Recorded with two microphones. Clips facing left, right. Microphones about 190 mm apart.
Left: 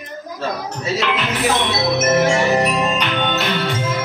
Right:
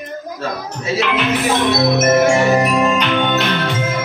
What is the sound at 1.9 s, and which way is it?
Music, 50° right (ahead or behind).